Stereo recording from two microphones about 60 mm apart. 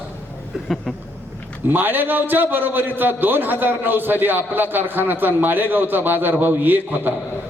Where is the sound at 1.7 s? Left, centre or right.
Right.